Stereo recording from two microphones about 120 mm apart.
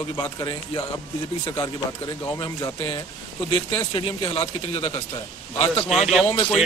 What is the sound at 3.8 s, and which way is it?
Speech, 40° left (ahead or behind).